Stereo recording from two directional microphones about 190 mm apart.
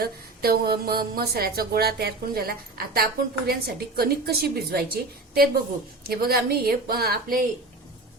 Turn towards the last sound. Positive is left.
turn(degrees=-50)  # may be behind; listen again after turning